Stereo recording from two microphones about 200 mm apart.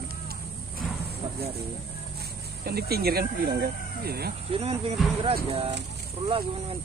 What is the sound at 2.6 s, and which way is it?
Speech, 50° right (ahead or behind).